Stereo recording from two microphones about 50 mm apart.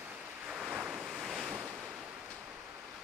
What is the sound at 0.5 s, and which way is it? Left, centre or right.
Waves, right.